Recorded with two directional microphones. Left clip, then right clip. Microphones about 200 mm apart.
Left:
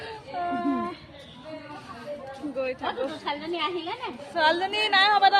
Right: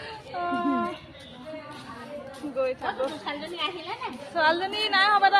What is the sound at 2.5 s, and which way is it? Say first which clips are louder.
Speech: right 3 dB; 10° left (ahead or behind).